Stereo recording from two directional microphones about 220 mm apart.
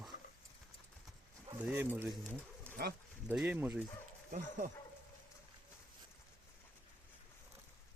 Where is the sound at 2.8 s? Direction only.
45° right (ahead or behind).